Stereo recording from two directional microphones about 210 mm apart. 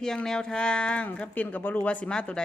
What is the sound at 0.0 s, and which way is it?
Speech, 5° left (ahead or behind).